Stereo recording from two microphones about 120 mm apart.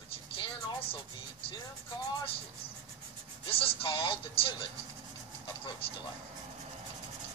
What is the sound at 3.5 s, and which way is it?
Speech, 50° left (ahead or behind).